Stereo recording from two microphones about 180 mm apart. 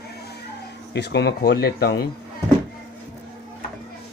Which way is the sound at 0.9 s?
70° left (ahead or behind).